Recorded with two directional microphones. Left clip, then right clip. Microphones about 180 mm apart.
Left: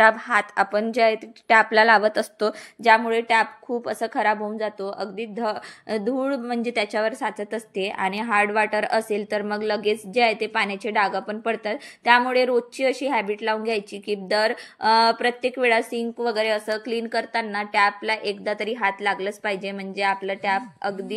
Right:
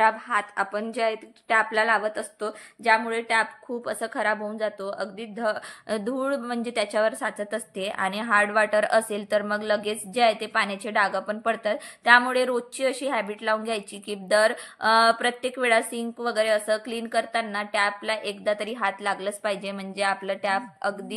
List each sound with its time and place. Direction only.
0.0 s a woman's voice: 25° left (ahead or behind); by 20.9 s centre (ahead or behind)